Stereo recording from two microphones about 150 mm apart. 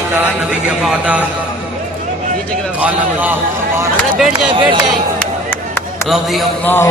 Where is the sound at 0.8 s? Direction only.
5° right (ahead or behind).